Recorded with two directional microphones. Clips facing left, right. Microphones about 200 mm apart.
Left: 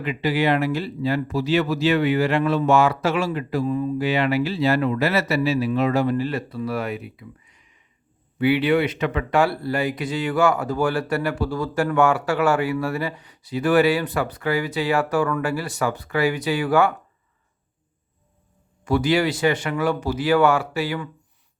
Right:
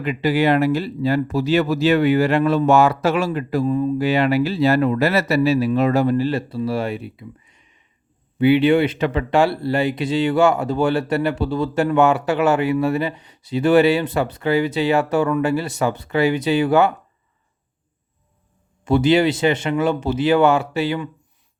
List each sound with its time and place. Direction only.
0.0 s speech: 40° right (ahead or behind); by 16.9 s 25° right (ahead or behind)
18.9 s speech: 25° right (ahead or behind)